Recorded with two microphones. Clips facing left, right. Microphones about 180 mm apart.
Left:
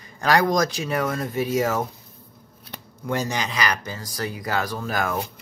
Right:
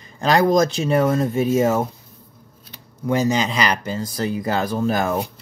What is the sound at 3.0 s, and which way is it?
Speech, 20° right (ahead or behind).